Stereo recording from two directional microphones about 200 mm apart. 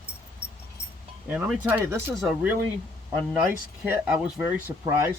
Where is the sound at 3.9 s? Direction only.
10° right (ahead or behind).